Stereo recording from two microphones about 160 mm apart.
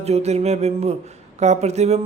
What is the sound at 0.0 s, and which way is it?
A man's voice, 40° right (ahead or behind).